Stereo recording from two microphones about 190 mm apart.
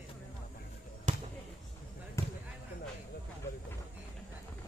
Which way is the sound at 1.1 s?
40° right (ahead or behind).